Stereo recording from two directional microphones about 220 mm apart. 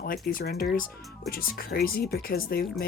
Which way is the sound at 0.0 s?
40° left (ahead or behind).